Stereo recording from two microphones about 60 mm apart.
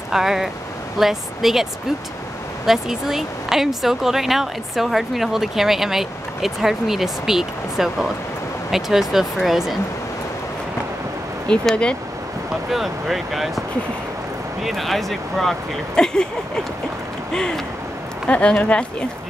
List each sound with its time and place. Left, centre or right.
0.1 s speech: centre
11.7 s speech: centre
12.7 s speech: centre
14.6 s speech: centre
17.3 s a sound: centre
18.2 s speech: centre